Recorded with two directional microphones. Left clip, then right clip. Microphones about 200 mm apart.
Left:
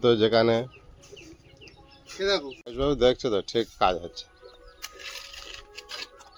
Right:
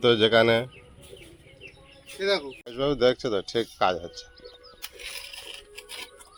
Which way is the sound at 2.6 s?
Centre (ahead or behind).